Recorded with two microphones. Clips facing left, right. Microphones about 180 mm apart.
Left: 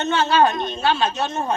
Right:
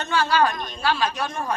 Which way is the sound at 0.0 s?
25° left (ahead or behind).